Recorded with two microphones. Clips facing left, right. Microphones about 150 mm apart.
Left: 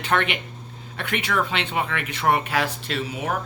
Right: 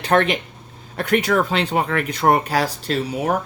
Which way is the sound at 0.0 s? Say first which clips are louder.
Right 6 dB; 35° right (ahead or behind).